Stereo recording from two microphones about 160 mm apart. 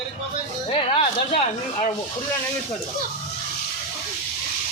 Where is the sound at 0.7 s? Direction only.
35° left (ahead or behind).